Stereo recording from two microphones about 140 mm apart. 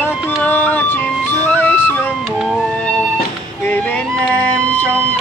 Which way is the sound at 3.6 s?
15° left (ahead or behind).